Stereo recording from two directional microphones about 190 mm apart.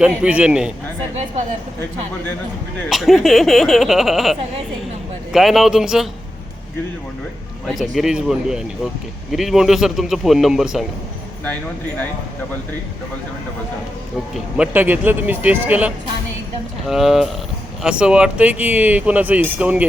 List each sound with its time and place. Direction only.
0.0 s speech: 5° right (ahead or behind)
2.9 s speech: centre (ahead or behind)
7.7 s speech: centre (ahead or behind)
14.3 s speech: 5° right (ahead or behind)